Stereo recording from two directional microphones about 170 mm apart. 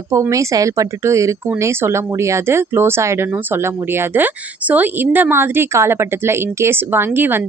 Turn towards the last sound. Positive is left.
turn(degrees=-10)  # may be behind; listen again after turning